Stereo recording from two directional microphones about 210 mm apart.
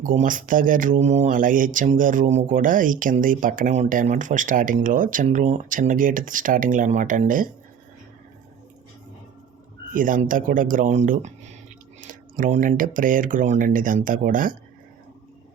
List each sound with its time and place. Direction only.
0.0 s speech: 40° right (ahead or behind)
9.9 s speech: 40° right (ahead or behind)